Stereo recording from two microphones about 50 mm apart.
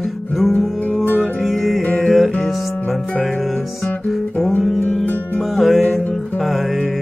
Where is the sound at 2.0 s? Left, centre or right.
Centre.